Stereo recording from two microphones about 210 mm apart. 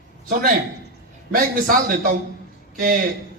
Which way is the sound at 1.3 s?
45° right (ahead or behind).